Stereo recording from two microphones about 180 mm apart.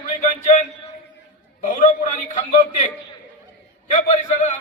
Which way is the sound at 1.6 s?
45° left (ahead or behind).